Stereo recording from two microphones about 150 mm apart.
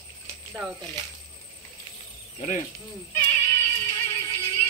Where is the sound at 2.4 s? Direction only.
50° left (ahead or behind).